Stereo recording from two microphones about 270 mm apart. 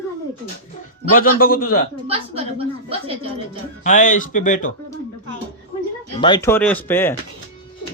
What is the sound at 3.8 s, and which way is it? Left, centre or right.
Speech, left.